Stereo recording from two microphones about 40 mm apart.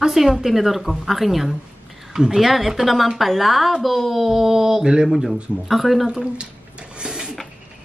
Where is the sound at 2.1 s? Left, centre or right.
Centre.